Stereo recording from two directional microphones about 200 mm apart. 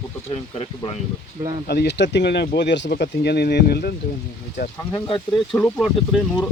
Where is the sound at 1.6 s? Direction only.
55° left (ahead or behind).